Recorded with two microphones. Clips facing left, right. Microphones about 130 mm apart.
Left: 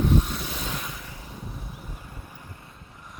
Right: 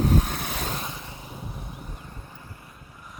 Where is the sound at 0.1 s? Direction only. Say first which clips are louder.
Even; 60° right (ahead or behind).